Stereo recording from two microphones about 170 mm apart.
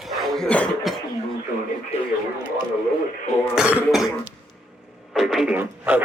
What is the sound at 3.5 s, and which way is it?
Throat clearing, 5° right (ahead or behind).